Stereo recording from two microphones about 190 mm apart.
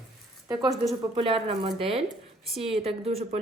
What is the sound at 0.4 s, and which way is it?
A woman's voice, 20° right (ahead or behind).